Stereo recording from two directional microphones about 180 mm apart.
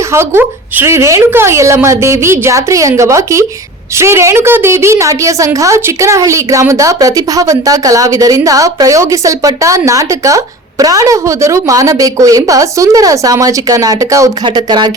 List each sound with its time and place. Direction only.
0.1 s a woman's voice: 15° right (ahead or behind)